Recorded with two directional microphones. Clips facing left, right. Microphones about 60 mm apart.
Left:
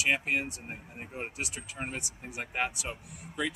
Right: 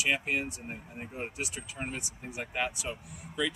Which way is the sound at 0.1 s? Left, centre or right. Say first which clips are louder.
Left 1 dB; left.